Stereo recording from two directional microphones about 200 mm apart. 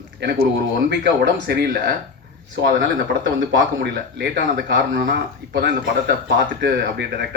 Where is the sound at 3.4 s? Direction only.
65° right (ahead or behind).